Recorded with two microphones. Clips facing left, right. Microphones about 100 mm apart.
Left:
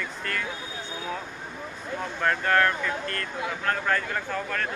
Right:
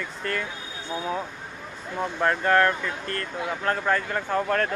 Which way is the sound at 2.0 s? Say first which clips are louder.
Right 3 dB; 20° right (ahead or behind).